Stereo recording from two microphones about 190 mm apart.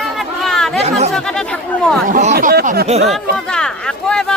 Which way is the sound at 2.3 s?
55° right (ahead or behind).